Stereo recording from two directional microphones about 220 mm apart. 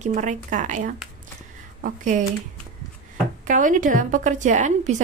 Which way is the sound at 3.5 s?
35° right (ahead or behind).